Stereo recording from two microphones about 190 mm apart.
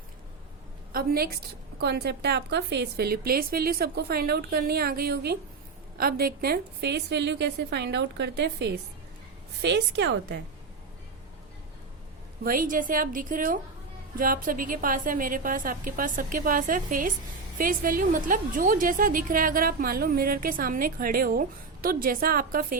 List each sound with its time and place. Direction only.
0.9 s a woman's voice: 55° right (ahead or behind)
12.4 s a woman's voice: 50° right (ahead or behind)